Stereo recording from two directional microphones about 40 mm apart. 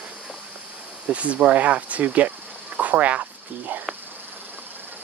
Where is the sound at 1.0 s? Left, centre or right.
Right.